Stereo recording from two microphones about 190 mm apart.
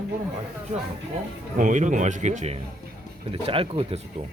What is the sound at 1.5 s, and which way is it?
Speech, 40° right (ahead or behind).